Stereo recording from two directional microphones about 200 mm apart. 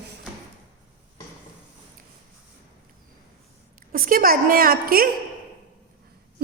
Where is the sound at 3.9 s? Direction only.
45° right (ahead or behind).